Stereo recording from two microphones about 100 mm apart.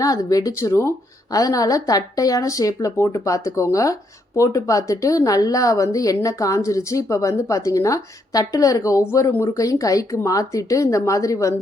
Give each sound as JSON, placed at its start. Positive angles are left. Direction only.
{"t": 0.0, "sound": "a woman's voice", "side_deg": 35}